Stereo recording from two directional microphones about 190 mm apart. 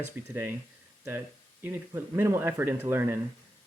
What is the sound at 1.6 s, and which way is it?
Speech, 10° right (ahead or behind).